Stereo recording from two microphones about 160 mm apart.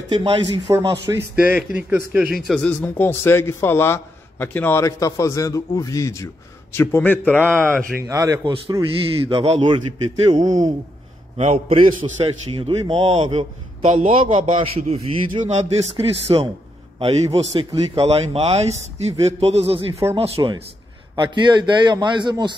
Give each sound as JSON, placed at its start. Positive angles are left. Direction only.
{"t": 0.1, "sound": "a man's voice", "side_deg": -30}
{"t": 0.7, "sound": "a man's voice", "side_deg": -20}
{"t": 1.3, "sound": "a man's voice", "side_deg": -5}
{"t": 7.5, "sound": "a man's voice", "side_deg": -15}
{"t": 9.3, "sound": "a man's voice", "side_deg": -35}
{"t": 10.3, "sound": "a man's voice", "side_deg": -25}
{"t": 11.3, "sound": "a man's voice", "side_deg": -40}
{"t": 19.9, "sound": "speech", "side_deg": -15}
{"t": 20.2, "sound": "a man's voice", "side_deg": -40}